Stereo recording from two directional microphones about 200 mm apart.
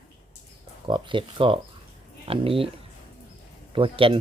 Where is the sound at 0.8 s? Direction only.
25° right (ahead or behind).